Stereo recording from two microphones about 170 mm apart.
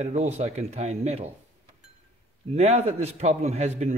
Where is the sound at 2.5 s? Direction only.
40° right (ahead or behind).